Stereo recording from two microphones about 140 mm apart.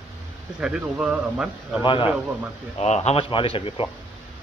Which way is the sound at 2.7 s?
50° left (ahead or behind).